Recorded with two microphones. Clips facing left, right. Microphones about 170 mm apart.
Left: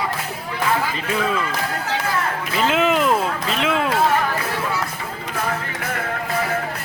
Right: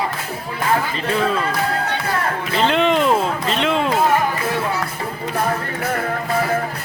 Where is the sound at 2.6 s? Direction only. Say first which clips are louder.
Right 2 dB; 5° left (ahead or behind).